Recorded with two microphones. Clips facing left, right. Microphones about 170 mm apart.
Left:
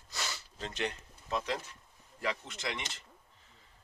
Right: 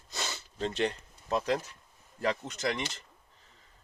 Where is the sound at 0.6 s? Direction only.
35° right (ahead or behind).